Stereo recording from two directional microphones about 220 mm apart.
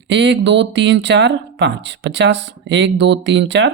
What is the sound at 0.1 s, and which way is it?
Speech, 50° right (ahead or behind).